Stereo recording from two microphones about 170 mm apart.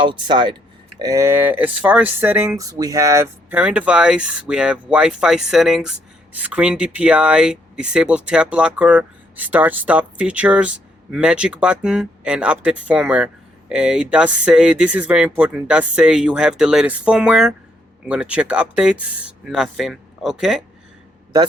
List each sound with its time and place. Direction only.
0.0 s speech: 30° right (ahead or behind); by 20.7 s 5° right (ahead or behind)